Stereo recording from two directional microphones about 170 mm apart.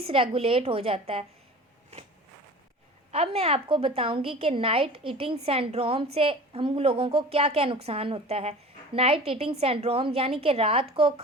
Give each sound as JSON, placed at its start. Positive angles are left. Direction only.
{"t": 0.0, "sound": "a woman's voice", "side_deg": -35}
{"t": 3.1, "sound": "a woman's voice", "side_deg": -35}